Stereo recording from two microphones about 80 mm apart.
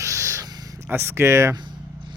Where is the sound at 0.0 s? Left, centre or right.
Right.